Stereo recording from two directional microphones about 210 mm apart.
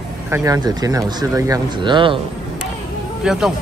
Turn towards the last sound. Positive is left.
turn(degrees=0)  # may be behind; listen again after turning